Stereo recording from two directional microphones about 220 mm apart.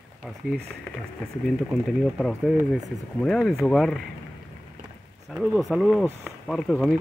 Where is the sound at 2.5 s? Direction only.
10° right (ahead or behind).